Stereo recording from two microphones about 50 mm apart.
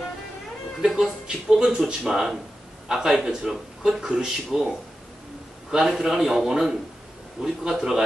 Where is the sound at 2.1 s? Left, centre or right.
Centre.